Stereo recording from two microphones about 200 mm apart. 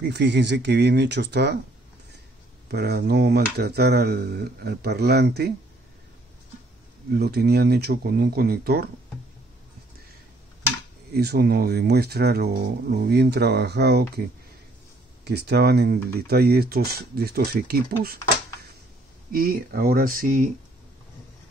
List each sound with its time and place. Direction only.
0.0 s speech: 60° right (ahead or behind)
2.7 s speech: 55° right (ahead or behind)
7.1 s speech: 50° right (ahead or behind)
11.1 s speech: 50° right (ahead or behind)
15.2 s speech: 55° right (ahead or behind)
19.3 s speech: 45° right (ahead or behind)